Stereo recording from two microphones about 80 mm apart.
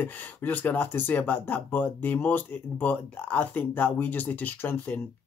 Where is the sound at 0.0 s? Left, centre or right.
Left.